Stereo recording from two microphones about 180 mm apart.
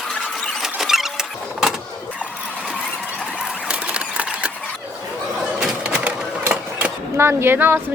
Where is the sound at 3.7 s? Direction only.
5° right (ahead or behind).